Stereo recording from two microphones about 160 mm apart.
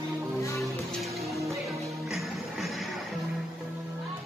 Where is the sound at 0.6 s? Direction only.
Centre (ahead or behind).